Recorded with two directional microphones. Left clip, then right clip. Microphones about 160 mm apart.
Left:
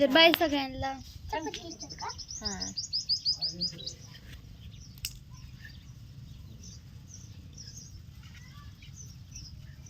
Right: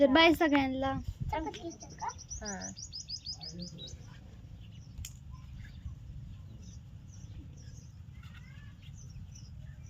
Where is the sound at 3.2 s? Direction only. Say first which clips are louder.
Left 13 dB; 75° right (ahead or behind).